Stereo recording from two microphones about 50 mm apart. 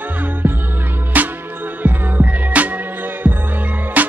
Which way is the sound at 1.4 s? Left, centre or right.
Right.